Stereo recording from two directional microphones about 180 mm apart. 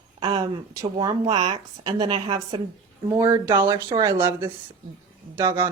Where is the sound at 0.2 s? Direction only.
20° right (ahead or behind).